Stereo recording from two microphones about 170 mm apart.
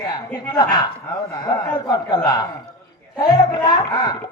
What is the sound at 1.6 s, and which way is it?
Speech, 25° left (ahead or behind).